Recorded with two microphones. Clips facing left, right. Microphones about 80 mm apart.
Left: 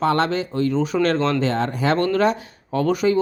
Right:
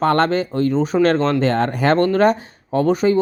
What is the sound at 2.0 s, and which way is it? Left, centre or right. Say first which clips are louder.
Speech: right 4 dB; right.